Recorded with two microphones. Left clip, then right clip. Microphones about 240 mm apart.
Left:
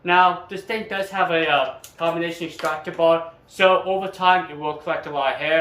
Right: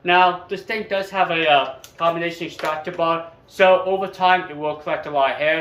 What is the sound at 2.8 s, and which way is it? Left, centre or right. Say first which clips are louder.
Speech: left 5 dB; centre.